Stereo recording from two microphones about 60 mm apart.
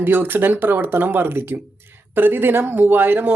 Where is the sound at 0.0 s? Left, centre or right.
Right.